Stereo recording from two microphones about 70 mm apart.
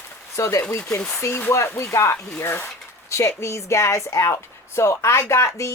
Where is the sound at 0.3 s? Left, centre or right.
Left.